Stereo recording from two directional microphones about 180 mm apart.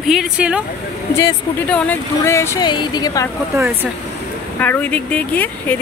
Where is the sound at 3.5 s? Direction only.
15° right (ahead or behind).